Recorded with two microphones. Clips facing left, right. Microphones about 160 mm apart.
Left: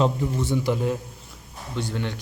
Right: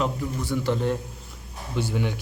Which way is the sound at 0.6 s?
10° left (ahead or behind).